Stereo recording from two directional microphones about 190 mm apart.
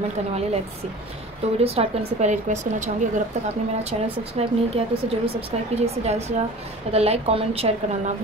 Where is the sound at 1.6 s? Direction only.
30° right (ahead or behind).